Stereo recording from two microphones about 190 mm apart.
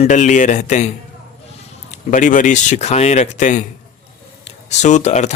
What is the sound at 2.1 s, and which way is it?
Speech, 40° left (ahead or behind).